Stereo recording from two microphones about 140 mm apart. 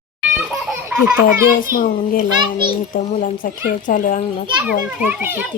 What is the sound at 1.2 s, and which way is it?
A child's voice, 85° left.